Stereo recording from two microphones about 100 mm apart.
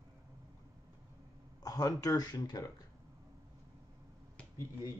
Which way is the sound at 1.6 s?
40° left (ahead or behind).